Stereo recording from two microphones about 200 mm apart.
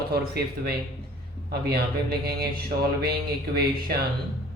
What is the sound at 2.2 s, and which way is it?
Speech, 50° right (ahead or behind).